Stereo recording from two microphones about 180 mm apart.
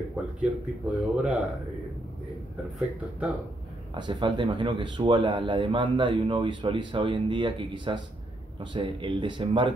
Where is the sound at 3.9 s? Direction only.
25° right (ahead or behind).